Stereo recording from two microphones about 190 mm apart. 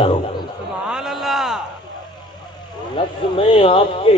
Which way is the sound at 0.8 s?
5° right (ahead or behind).